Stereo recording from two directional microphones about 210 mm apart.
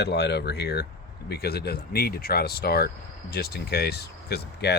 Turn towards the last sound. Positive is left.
turn(degrees=50)  # may be behind; listen again after turning